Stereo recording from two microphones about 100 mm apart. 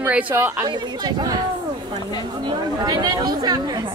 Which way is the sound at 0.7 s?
45° right (ahead or behind).